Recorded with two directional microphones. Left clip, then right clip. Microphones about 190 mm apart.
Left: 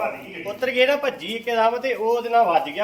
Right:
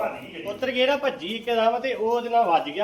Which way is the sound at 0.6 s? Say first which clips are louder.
Left 3 dB; 60° left (ahead or behind).